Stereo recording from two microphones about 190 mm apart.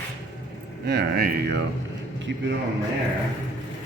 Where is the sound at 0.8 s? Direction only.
55° right (ahead or behind).